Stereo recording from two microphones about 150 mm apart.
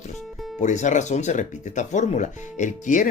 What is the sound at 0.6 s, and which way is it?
Speech, 55° left (ahead or behind).